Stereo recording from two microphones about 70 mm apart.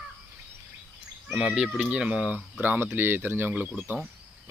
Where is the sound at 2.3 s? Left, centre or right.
Right.